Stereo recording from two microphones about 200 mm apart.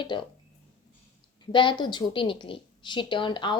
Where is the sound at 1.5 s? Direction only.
25° left (ahead or behind).